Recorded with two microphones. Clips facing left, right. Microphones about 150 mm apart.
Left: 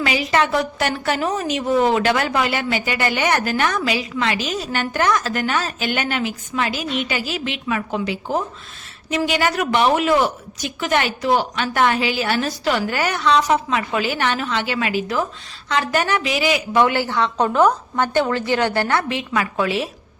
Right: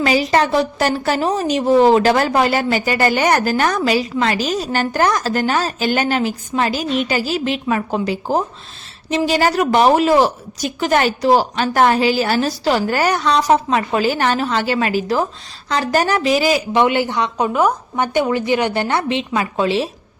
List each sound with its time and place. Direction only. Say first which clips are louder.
0.0 s a woman's voice: right 4 dB; 35° right (ahead or behind)
16.7 s a woman's voice: right 2 dB; 20° right (ahead or behind)